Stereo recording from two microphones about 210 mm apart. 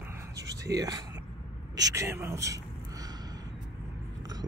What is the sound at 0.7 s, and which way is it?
Speech, 15° right (ahead or behind).